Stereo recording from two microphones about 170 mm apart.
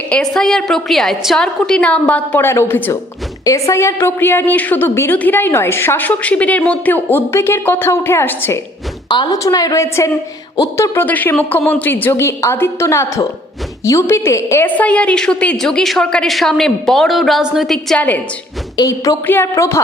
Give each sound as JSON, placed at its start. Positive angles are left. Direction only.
{"t": 0.1, "sound": "a woman's voice", "side_deg": 5}
{"t": 9.0, "sound": "a woman's voice", "side_deg": 25}
{"t": 18.8, "sound": "a woman's voice", "side_deg": 20}